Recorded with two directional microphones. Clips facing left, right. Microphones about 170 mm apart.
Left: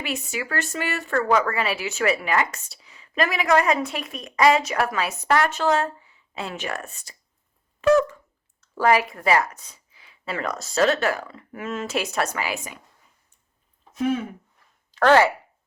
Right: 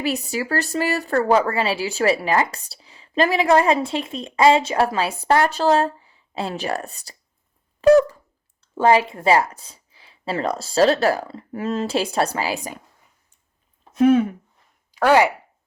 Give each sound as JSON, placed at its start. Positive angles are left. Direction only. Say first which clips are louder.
{"t": 0.0, "sound": "a woman's voice", "louder": "right 6 dB", "side_deg": -35}
{"t": 7.8, "sound": "a sound", "louder": "right 5 dB", "side_deg": -35}
{"t": 8.6, "sound": "a woman's voice", "louder": "right 3 dB", "side_deg": -25}
{"t": 13.9, "sound": "speech", "louder": "right 9 dB", "side_deg": -60}
{"t": 14.9, "sound": "speech", "louder": "right 1 dB", "side_deg": -10}